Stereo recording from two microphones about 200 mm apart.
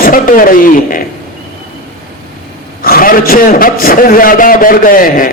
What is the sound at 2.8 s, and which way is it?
Speech, 45° left (ahead or behind).